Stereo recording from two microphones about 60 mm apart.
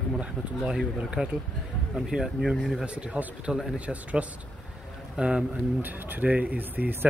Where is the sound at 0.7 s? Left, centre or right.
Centre.